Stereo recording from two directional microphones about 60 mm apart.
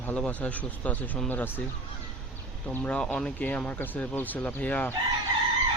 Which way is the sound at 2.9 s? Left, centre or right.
Centre.